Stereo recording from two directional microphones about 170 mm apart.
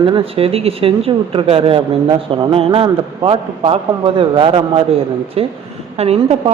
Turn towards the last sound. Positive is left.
turn(degrees=-35)  # may be behind; listen again after turning